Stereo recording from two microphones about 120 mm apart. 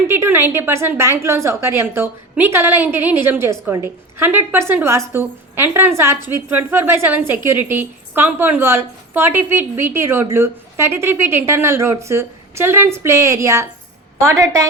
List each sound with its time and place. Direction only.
0.1 s a woman's voice: 20° right (ahead or behind)